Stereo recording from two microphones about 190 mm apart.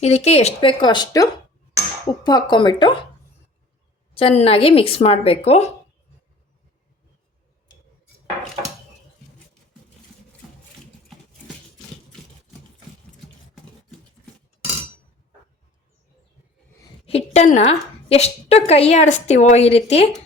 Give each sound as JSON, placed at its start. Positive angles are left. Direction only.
{"t": 0.0, "sound": "speech", "side_deg": 35}
{"t": 4.1, "sound": "speech", "side_deg": 30}
{"t": 17.1, "sound": "a woman's voice", "side_deg": 35}